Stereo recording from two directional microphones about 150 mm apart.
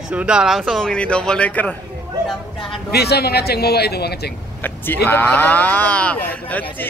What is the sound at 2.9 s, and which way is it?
Speech, 90° left.